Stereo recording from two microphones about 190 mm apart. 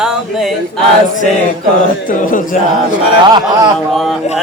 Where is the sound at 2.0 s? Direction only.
45° left (ahead or behind).